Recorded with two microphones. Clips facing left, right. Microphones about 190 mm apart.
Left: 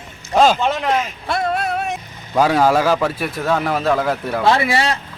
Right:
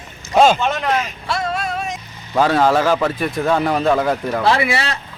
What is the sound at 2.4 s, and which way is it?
A man's voice, 10° left (ahead or behind).